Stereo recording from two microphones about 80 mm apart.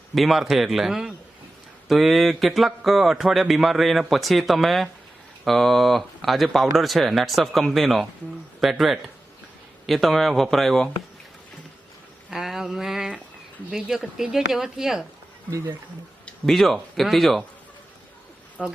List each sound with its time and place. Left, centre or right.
0.1 s speech: centre
12.3 s a sound: centre
13.7 s speech: centre
15.4 s a man's voice: right
16.5 s speech: centre
18.6 s speech: centre